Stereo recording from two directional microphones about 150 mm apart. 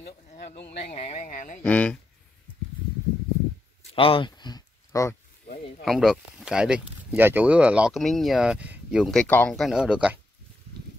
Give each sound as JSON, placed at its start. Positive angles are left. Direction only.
{"t": 0.7, "sound": "speech", "side_deg": 40}
{"t": 1.6, "sound": "speech", "side_deg": 10}
{"t": 3.9, "sound": "a sound", "side_deg": 35}
{"t": 5.9, "sound": "speech", "side_deg": 0}
{"t": 9.6, "sound": "speech", "side_deg": -5}